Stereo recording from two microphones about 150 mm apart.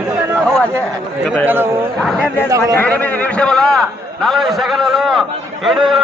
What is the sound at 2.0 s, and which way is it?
A man's voice, 5° left (ahead or behind).